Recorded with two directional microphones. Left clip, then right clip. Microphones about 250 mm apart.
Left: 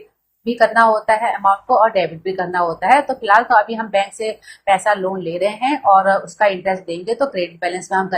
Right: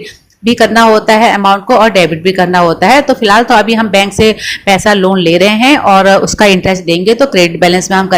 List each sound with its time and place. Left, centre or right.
0.5 s speech: right